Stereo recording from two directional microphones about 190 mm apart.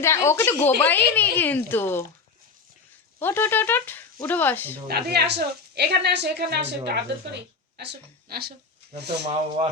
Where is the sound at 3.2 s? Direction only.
10° left (ahead or behind).